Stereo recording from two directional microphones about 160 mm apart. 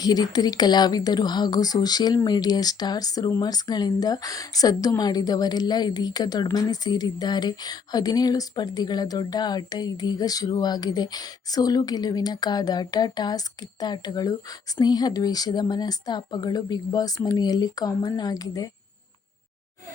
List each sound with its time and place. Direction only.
0.0 s speech: 25° left (ahead or behind)